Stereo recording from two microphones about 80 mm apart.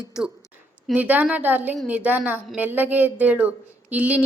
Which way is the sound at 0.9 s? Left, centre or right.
Centre.